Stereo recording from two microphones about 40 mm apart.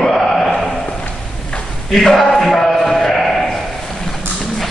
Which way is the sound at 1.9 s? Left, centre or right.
Centre.